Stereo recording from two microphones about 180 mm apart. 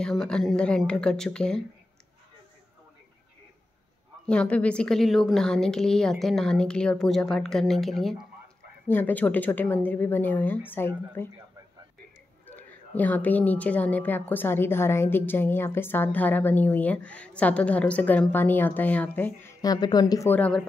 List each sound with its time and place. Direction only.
0.0 s a woman's voice: 5° left (ahead or behind)
4.3 s a woman's voice: 5° left (ahead or behind)
12.4 s a woman's voice: 10° left (ahead or behind)